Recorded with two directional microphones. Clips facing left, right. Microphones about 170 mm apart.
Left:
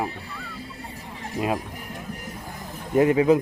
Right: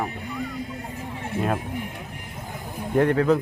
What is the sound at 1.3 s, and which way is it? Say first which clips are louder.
Speech: even; 35° left (ahead or behind).